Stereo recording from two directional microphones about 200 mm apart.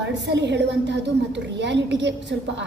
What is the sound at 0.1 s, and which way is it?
A woman's voice, 60° right (ahead or behind).